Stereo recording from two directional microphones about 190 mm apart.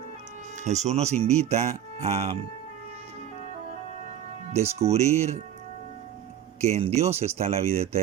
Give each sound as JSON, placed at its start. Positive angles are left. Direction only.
{"t": 0.6, "sound": "speech", "side_deg": -35}
{"t": 4.8, "sound": "speech", "side_deg": -35}
{"t": 6.6, "sound": "speech", "side_deg": -35}